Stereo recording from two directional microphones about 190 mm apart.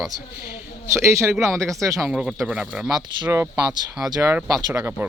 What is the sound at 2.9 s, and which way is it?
A man's voice, 15° right (ahead or behind).